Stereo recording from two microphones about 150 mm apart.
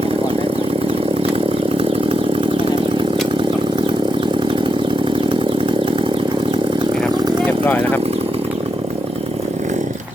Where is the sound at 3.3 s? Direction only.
35° right (ahead or behind).